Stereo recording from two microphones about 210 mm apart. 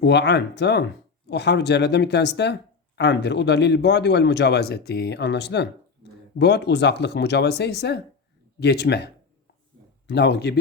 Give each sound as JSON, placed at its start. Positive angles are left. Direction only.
{"t": 0.0, "sound": "speech", "side_deg": 55}
{"t": 10.1, "sound": "speech", "side_deg": 50}